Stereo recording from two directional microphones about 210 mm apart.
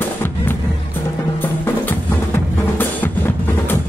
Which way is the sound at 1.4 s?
10° left (ahead or behind).